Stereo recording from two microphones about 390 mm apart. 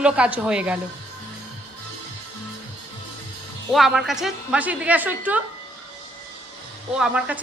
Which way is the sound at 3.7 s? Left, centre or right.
Centre.